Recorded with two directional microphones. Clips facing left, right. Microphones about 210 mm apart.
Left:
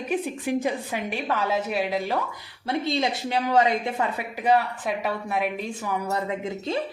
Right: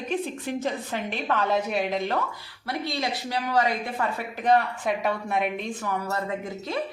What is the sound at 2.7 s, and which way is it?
Speech, 25° left (ahead or behind).